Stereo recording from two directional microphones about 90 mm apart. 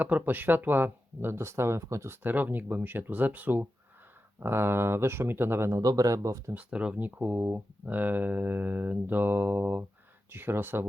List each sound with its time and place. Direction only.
0.0 s speech: 20° right (ahead or behind)
5.8 s speech: 45° right (ahead or behind)
6.5 s speech: 15° right (ahead or behind)